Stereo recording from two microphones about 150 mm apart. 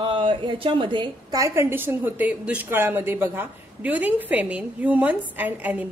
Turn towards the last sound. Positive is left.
turn(degrees=-10)  # may be behind; listen again after turning